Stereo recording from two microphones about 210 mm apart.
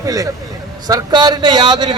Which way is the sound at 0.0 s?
15° right (ahead or behind).